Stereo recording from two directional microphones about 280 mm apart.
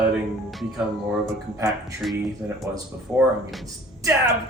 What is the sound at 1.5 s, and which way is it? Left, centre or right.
Speech, centre.